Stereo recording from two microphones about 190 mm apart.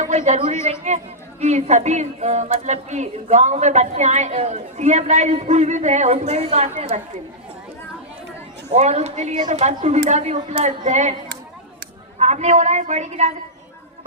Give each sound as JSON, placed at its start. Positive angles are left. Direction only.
{"t": 0.0, "sound": "a man's voice", "side_deg": -40}
{"t": 8.7, "sound": "speech", "side_deg": -35}
{"t": 12.2, "sound": "speech", "side_deg": -35}